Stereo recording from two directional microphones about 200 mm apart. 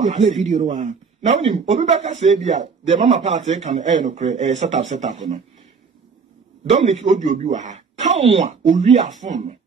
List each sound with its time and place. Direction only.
0.0 s speech: 35° right (ahead or behind)
6.6 s speech: 35° right (ahead or behind)